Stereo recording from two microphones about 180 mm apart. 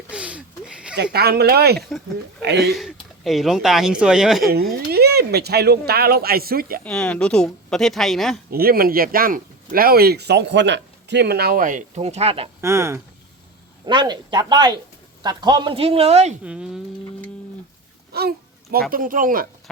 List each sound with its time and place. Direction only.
0.1 s a sound: 5° right (ahead or behind)
1.1 s speech: 60° right (ahead or behind)
2.7 s speech: centre (ahead or behind)
4.9 s speech: 65° right (ahead or behind)
6.8 s speech: 5° left (ahead or behind)
8.4 s speech: 55° right (ahead or behind); by 12.5 s 35° right (ahead or behind)
12.6 s speech: 15° right (ahead or behind); by 16.3 s 35° right (ahead or behind)
16.4 s speech: 5° right (ahead or behind)
18.1 s speech: 60° right (ahead or behind)